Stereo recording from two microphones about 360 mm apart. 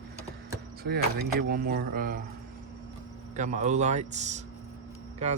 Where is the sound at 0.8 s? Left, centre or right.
Right.